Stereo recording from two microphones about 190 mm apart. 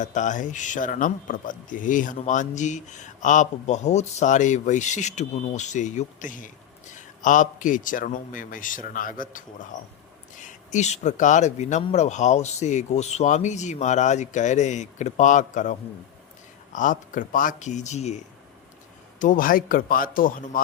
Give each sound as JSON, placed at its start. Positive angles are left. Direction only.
{"t": 0.0, "sound": "a man's voice", "side_deg": 40}
{"t": 19.2, "sound": "a man's voice", "side_deg": 45}